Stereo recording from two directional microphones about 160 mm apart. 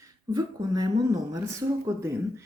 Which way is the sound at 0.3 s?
25° right (ahead or behind).